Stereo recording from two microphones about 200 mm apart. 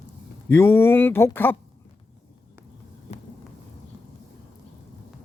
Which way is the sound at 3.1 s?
35° left (ahead or behind).